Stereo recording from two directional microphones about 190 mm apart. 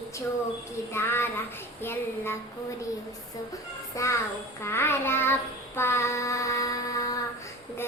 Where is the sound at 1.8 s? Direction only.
10° left (ahead or behind).